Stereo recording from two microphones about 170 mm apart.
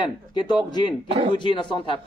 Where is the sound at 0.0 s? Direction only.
25° left (ahead or behind).